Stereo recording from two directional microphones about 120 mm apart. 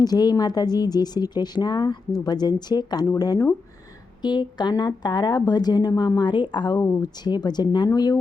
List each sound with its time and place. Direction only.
0.0 s speech: 35° left (ahead or behind)